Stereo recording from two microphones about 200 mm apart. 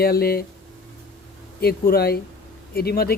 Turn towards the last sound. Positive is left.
turn(degrees=50)  # may be behind; listen again after turning